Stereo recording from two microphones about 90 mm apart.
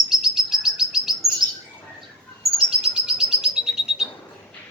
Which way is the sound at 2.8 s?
5° right (ahead or behind).